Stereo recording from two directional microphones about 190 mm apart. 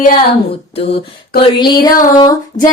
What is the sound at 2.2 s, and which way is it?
Female singing, 20° left (ahead or behind).